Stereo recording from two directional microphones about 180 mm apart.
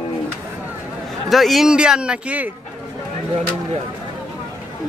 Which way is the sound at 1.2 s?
Centre (ahead or behind).